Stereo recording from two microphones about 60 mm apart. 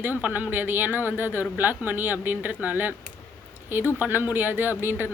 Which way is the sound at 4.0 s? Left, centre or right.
Right.